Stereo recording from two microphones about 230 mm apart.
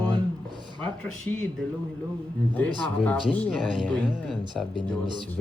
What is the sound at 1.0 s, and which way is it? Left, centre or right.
Speech, centre.